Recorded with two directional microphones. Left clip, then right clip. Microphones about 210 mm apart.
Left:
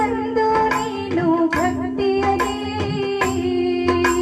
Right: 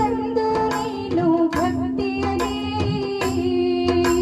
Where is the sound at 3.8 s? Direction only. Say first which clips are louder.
Left 3 dB; 25° left (ahead or behind).